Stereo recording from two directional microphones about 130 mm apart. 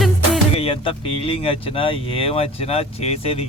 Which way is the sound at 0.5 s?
45° left (ahead or behind).